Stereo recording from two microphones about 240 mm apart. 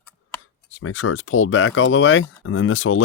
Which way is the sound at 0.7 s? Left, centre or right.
Left.